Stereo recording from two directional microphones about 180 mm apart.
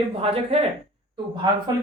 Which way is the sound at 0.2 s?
35° right (ahead or behind).